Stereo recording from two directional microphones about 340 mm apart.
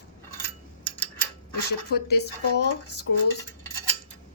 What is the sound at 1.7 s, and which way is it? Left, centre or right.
Speech, left.